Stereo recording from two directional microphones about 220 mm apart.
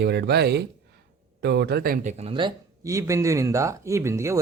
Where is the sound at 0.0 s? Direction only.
50° right (ahead or behind).